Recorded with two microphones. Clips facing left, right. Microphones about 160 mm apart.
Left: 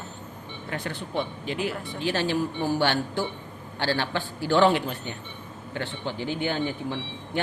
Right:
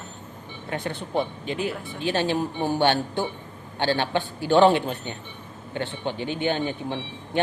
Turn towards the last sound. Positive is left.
turn(degrees=-20)  # may be behind; listen again after turning